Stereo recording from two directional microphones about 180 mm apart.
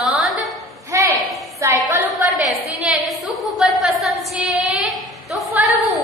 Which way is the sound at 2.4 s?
Centre (ahead or behind).